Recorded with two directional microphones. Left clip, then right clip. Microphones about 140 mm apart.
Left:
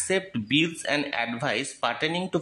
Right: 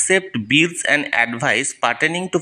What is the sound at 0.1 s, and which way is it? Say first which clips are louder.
Speech: right 8 dB; 30° right (ahead or behind).